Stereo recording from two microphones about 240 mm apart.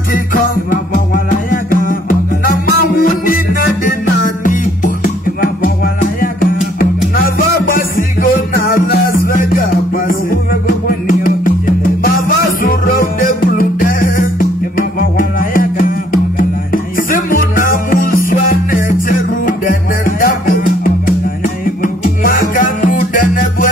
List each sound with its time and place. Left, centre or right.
0.3 s music: left
4.5 s music: left